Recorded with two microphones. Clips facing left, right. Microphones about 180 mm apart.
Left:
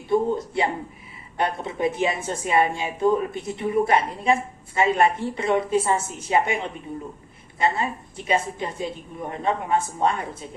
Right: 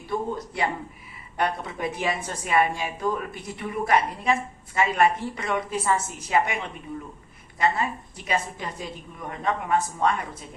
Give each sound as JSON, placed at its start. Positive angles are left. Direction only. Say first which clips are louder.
{"t": 0.1, "sound": "speech", "louder": "left 7 dB", "side_deg": 25}